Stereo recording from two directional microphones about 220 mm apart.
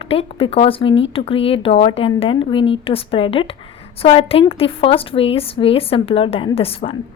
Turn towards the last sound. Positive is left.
turn(degrees=25)  # may be behind; listen again after turning